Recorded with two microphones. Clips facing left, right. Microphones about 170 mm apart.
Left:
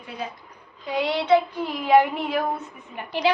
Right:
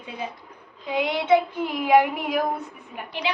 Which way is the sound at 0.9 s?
20° right (ahead or behind).